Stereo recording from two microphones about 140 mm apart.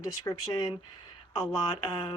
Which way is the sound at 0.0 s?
30° left (ahead or behind).